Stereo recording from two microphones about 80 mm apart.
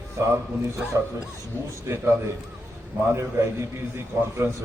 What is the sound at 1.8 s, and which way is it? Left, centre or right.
Speech, right.